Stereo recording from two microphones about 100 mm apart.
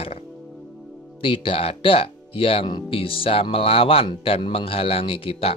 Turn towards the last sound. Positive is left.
turn(degrees=65)  # may be behind; listen again after turning